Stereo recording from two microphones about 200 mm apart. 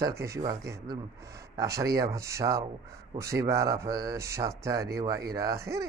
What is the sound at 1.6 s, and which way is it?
Speech, 15° right (ahead or behind).